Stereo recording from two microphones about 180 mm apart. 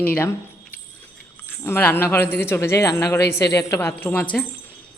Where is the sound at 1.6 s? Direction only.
15° left (ahead or behind).